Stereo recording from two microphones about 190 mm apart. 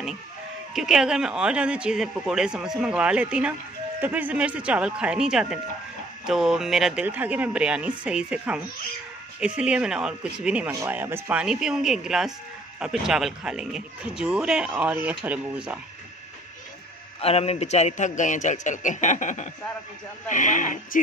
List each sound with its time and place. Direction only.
0.7 s speech: centre (ahead or behind)
17.2 s a man's voice: 30° left (ahead or behind)